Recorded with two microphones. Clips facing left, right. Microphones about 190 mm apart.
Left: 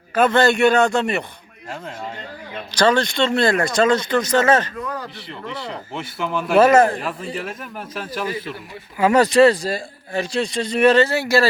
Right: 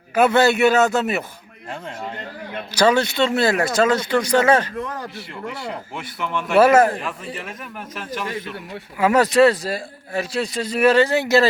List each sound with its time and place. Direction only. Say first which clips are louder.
0.1 s a man's voice: even; 10° right (ahead or behind)
2.7 s a man's voice: even; 10° right (ahead or behind)